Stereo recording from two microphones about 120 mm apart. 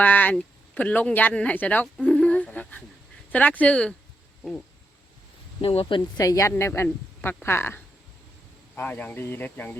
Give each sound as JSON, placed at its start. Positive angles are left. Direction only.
{"t": 0.0, "sound": "speech", "side_deg": 15}
{"t": 2.0, "sound": "a sound", "side_deg": 10}
{"t": 3.3, "sound": "speech", "side_deg": 15}
{"t": 5.6, "sound": "speech", "side_deg": 50}
{"t": 6.1, "sound": "a woman's voice", "side_deg": 30}